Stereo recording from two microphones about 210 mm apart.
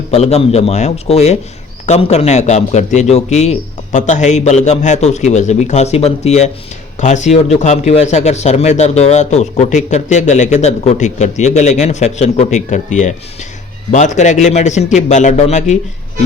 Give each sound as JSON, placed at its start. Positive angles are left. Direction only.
{"t": 0.1, "sound": "a man's voice", "side_deg": 30}